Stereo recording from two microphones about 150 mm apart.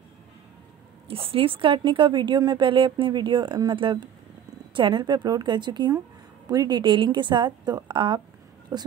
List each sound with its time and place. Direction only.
1.0 s a woman's voice: 40° right (ahead or behind)